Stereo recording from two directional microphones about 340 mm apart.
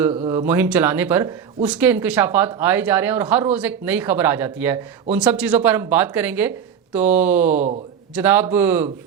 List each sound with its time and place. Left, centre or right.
0.1 s speech: centre